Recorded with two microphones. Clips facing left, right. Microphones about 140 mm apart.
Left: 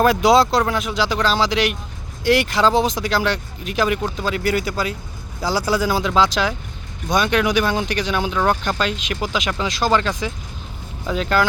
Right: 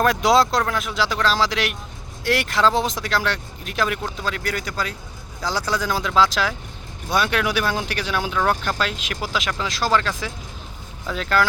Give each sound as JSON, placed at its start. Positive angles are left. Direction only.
{"t": 0.0, "sound": "speech", "side_deg": 0}